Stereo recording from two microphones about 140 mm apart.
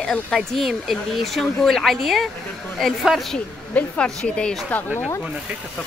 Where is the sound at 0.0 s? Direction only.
5° left (ahead or behind).